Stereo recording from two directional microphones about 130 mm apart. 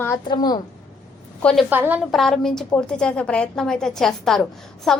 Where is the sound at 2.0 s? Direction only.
Centre (ahead or behind).